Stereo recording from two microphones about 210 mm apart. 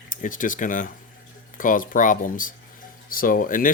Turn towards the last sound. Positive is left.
turn(degrees=40)  # may be behind; listen again after turning